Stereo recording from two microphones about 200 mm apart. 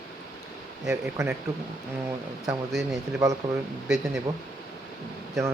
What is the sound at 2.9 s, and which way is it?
Speech, 15° right (ahead or behind).